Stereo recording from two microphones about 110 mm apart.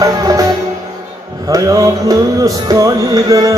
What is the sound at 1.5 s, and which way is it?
Music, 35° right (ahead or behind).